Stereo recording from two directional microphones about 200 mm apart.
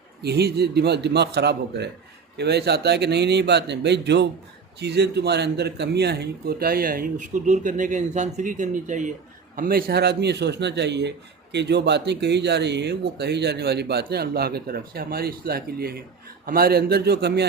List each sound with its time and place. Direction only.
0.2 s speech: 55° right (ahead or behind)